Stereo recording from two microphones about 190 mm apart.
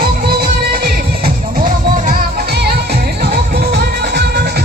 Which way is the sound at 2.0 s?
50° right (ahead or behind).